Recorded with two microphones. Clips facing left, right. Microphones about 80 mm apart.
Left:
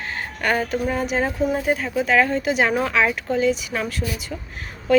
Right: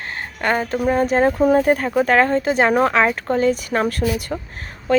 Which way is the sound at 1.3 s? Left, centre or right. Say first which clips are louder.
Right 6 dB; right.